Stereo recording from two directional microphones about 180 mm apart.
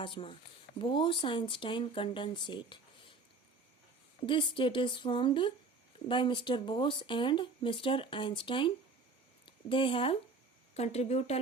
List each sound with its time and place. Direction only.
0.0 s speech: 30° left (ahead or behind)
4.3 s speech: 30° left (ahead or behind)